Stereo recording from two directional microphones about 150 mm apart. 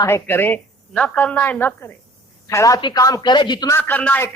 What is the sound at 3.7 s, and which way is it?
Speech, 10° left (ahead or behind).